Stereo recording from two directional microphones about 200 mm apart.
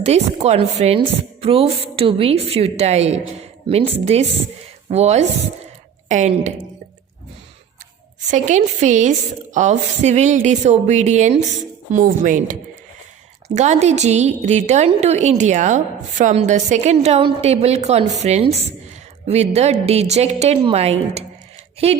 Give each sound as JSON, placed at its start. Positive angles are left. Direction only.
{"t": 0.0, "sound": "a woman's voice", "side_deg": -30}
{"t": 8.3, "sound": "a woman's voice", "side_deg": -35}